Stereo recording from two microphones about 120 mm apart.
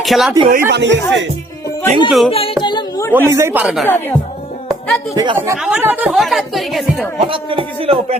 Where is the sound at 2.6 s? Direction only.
40° left (ahead or behind).